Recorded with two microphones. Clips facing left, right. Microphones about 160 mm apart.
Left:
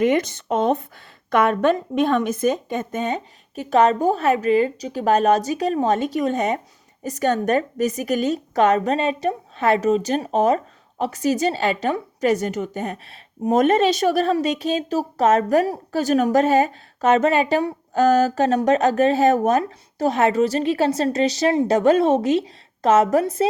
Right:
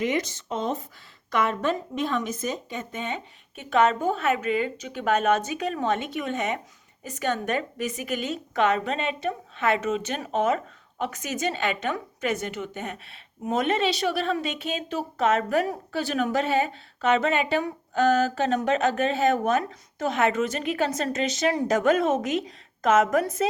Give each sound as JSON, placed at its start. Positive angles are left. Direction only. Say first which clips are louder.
{"t": 0.0, "sound": "a woman's voice", "louder": "left 7 dB", "side_deg": 55}